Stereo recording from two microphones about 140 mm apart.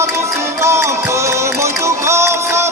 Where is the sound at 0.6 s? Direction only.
20° right (ahead or behind).